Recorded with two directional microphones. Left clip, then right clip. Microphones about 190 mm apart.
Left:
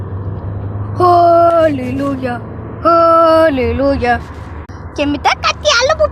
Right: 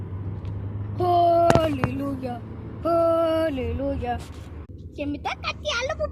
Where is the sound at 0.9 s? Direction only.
15° left (ahead or behind).